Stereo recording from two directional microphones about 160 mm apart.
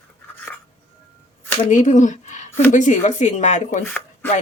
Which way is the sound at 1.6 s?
50° left (ahead or behind).